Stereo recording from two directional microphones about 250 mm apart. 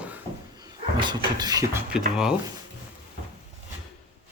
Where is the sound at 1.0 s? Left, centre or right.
Centre.